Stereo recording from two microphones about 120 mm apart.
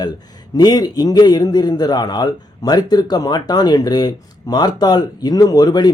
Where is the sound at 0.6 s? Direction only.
35° left (ahead or behind).